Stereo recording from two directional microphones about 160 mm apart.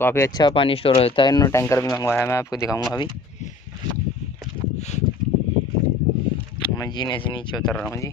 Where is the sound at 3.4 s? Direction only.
45° left (ahead or behind).